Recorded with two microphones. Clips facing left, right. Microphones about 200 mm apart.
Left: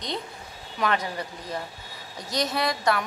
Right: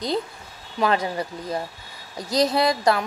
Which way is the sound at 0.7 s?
30° right (ahead or behind).